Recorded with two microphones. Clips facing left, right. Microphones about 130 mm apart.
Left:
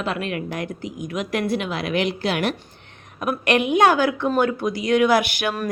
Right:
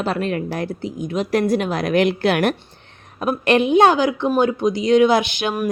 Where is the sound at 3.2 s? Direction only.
30° right (ahead or behind).